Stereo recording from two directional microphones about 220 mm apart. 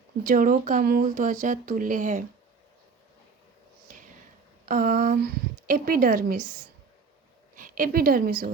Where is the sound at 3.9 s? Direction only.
40° right (ahead or behind).